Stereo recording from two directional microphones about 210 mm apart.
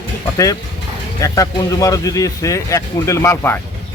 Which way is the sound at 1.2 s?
15° left (ahead or behind).